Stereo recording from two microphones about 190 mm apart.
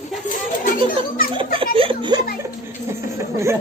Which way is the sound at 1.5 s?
30° right (ahead or behind).